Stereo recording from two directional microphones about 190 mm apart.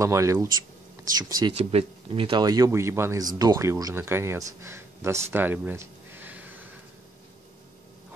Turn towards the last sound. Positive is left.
turn(degrees=-10)  # may be behind; listen again after turning